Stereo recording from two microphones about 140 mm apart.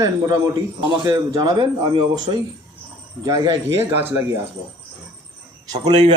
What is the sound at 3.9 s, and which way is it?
Speech, 15° right (ahead or behind).